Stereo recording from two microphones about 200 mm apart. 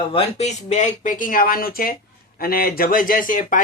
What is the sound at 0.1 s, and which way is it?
Speech, 30° left (ahead or behind).